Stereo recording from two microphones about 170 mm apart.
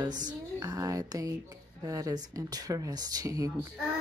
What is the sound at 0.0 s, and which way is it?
Speech, 25° right (ahead or behind).